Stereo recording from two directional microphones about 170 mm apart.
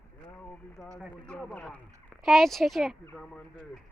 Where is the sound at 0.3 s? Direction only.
10° left (ahead or behind).